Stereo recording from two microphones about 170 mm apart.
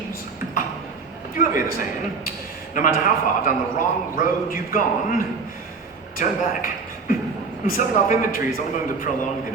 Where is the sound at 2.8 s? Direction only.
55° left (ahead or behind).